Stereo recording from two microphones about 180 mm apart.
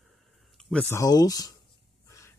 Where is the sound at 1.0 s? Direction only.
20° left (ahead or behind).